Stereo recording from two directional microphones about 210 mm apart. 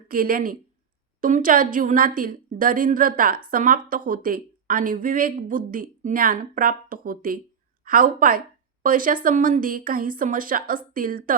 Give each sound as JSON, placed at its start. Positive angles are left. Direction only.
{"t": 0.1, "sound": "a woman's voice", "side_deg": -40}